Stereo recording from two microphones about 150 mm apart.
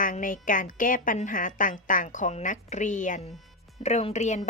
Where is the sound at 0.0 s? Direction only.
65° left (ahead or behind).